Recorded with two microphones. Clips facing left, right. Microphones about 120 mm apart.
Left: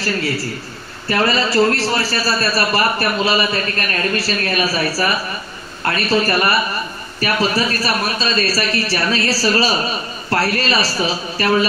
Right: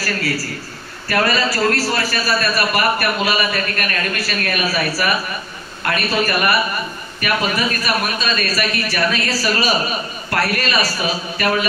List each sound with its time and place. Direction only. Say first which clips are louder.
1.0 s a man's voice: left 1 dB; 25° left (ahead or behind)